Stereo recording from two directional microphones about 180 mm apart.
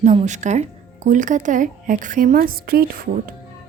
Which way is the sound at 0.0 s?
40° right (ahead or behind).